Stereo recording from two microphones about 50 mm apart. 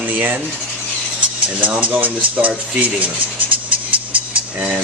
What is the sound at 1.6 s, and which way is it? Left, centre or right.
Speech, right.